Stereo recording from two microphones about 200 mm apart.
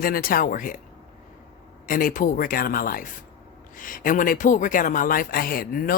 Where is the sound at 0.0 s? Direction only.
45° left (ahead or behind).